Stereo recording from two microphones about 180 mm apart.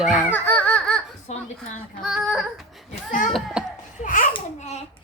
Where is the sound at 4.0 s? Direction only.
50° left (ahead or behind).